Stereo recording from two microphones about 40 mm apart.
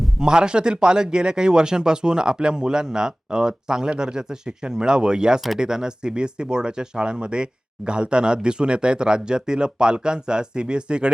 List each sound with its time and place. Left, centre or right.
0.2 s a man's voice: right